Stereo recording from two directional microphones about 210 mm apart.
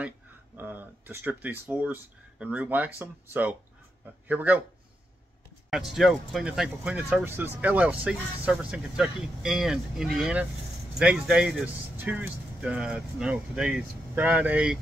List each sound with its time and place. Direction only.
0.6 s speech: 10° right (ahead or behind)
5.7 s speech: centre (ahead or behind)